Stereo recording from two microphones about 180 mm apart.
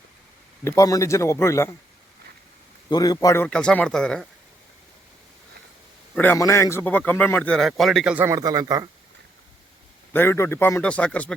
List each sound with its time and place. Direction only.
0.6 s a man's voice: 20° left (ahead or behind)
2.9 s a man's voice: 20° left (ahead or behind)
3.4 s speech: 5° left (ahead or behind)
6.1 s a man's voice: 15° left (ahead or behind); by 8.9 s 20° right (ahead or behind)
10.1 s a man's voice: 10° left (ahead or behind)